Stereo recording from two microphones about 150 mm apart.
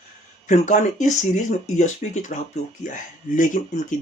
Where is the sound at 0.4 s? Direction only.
55° left (ahead or behind).